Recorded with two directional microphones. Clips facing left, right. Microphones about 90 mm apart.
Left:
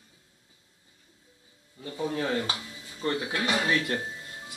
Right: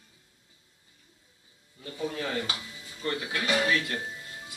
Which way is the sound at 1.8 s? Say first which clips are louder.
Left 3 dB; 20° left (ahead or behind).